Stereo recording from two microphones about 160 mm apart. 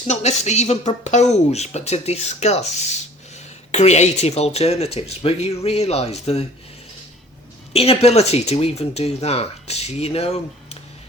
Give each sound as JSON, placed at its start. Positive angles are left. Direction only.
{"t": 0.1, "sound": "speech", "side_deg": 45}
{"t": 7.7, "sound": "speech", "side_deg": 40}